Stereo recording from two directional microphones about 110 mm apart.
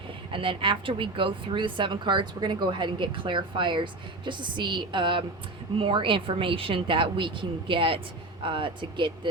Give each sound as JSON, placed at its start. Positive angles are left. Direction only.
{"t": 0.3, "sound": "a woman's voice", "side_deg": -50}